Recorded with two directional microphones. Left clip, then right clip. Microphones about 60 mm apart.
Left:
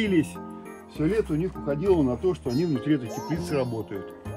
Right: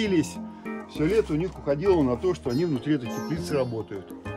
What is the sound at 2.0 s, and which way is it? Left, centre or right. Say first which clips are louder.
Speech: even; right.